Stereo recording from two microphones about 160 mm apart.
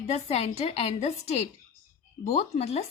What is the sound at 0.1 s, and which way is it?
Speech, 40° left (ahead or behind).